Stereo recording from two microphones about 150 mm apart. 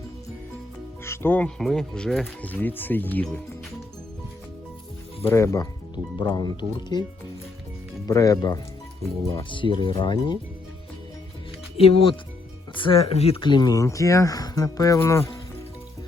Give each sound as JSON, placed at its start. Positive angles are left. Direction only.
{"t": 1.0, "sound": "speech", "side_deg": 15}
{"t": 5.2, "sound": "speech", "side_deg": 20}
{"t": 8.0, "sound": "speech", "side_deg": 25}
{"t": 11.8, "sound": "speech", "side_deg": 40}